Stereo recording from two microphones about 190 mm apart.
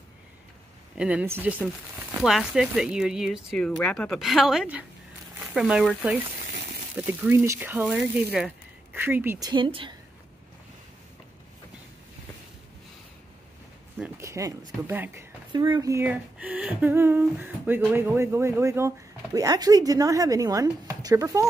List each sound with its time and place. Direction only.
0.9 s speech: 5° right (ahead or behind)
9.5 s a woman's voice: 25° right (ahead or behind)
13.9 s speech: 10° right (ahead or behind)
15.5 s speech: 25° right (ahead or behind)